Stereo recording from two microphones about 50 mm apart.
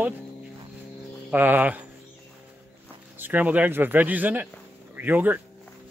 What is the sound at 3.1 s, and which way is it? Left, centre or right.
Speech, right.